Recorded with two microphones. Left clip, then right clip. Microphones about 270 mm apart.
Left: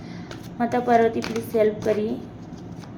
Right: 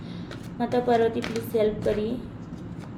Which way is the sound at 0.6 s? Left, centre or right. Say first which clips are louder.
Left 3 dB; centre.